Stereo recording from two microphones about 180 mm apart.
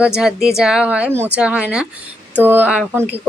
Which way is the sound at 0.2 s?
5° right (ahead or behind).